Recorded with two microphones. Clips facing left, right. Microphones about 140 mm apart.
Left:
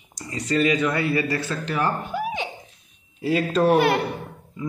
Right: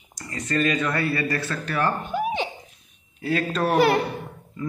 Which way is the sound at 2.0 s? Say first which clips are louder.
Right 2 dB; 20° right (ahead or behind).